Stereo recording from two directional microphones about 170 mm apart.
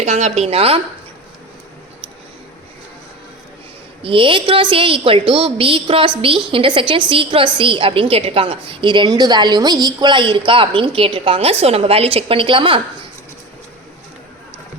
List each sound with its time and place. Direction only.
0.0 s a woman's voice: 40° right (ahead or behind)
4.0 s a woman's voice: 30° right (ahead or behind)